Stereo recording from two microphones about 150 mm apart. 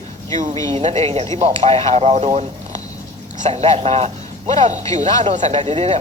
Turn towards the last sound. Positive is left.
turn(degrees=-45)  # may be behind; listen again after turning